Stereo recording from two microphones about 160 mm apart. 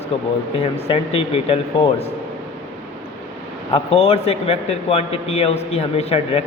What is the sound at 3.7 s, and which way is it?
A man's voice, 35° left (ahead or behind).